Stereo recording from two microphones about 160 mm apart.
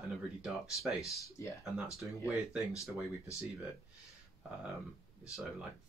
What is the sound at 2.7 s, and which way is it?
Speech, 20° left (ahead or behind).